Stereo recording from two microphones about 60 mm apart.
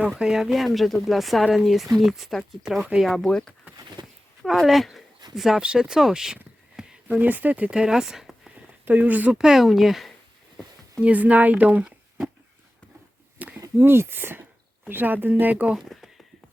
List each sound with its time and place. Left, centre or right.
0.0 s speech: centre
4.4 s speech: centre
7.1 s speech: right
7.7 s speech: centre
8.8 s speech: right
9.3 s speech: centre
11.0 s speech: right
13.4 s a sound: right
13.7 s speech: right
15.8 s a sound: centre